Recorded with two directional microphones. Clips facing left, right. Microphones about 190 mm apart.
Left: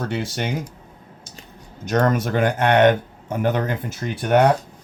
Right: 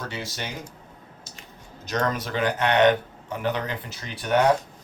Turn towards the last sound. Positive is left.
turn(degrees=50)  # may be behind; listen again after turning